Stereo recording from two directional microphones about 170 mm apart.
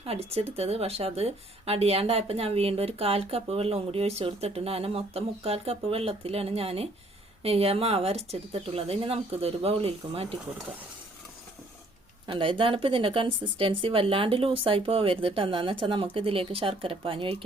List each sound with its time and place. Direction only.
0.0 s speech: 35° right (ahead or behind)
12.2 s speech: 30° right (ahead or behind)